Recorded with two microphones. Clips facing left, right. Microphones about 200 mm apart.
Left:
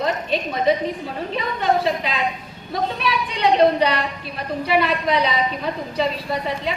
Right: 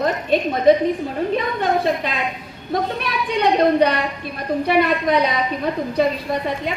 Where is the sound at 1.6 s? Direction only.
50° right (ahead or behind).